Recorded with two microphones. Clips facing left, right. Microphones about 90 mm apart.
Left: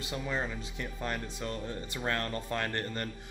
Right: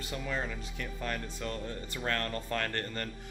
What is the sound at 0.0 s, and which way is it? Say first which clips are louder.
Speech: left 1 dB; 20° left (ahead or behind).